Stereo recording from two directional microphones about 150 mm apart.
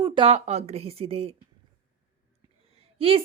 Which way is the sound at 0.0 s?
35° right (ahead or behind).